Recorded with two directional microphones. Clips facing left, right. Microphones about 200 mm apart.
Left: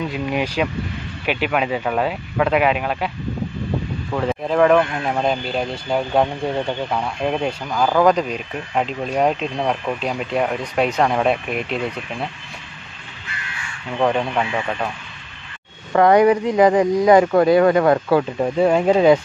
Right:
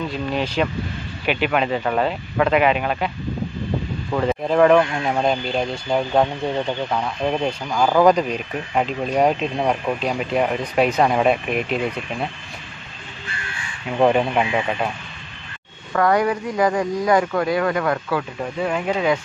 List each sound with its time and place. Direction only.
0.1 s speech: 10° left (ahead or behind)
4.1 s speech: centre (ahead or behind)
13.9 s speech: 10° right (ahead or behind)
15.9 s speech: 25° left (ahead or behind)